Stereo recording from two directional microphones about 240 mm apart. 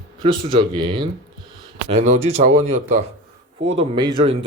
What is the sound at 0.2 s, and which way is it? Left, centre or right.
Speech, centre.